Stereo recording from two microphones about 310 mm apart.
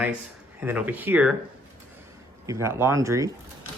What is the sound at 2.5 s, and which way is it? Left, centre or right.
Speech, centre.